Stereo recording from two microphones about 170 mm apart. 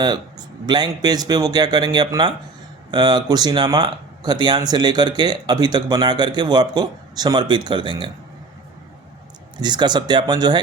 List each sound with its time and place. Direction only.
0.0 s speech: 25° right (ahead or behind)
9.6 s speech: 25° right (ahead or behind)